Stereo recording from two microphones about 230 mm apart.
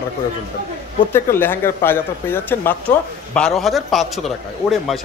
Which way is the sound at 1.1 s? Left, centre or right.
Centre.